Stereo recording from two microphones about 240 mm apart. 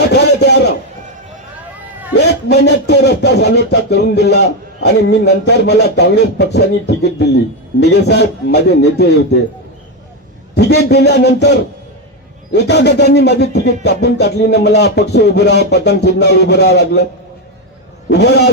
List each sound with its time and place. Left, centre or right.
0.1 s a sound: left
2.1 s speech: left
10.5 s speech: left
18.1 s speech: left